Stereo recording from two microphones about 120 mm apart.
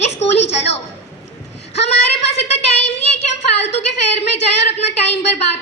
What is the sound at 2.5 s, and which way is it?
A child's voice, 60° left (ahead or behind).